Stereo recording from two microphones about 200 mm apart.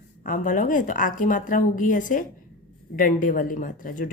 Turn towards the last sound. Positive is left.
turn(degrees=45)  # may be behind; listen again after turning